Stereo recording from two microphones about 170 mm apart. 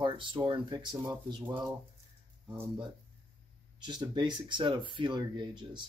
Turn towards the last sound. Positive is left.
turn(degrees=-25)  # may be behind; listen again after turning